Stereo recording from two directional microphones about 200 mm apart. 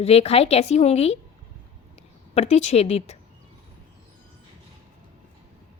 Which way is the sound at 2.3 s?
30° left (ahead or behind).